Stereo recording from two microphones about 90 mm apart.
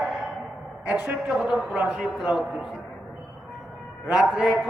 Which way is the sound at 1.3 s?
5° right (ahead or behind).